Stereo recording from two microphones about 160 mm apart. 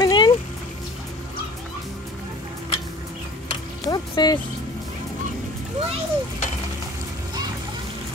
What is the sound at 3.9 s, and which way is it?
Speech, 25° left (ahead or behind).